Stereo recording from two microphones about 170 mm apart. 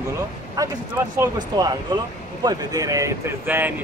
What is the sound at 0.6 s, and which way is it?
Speech, 20° right (ahead or behind).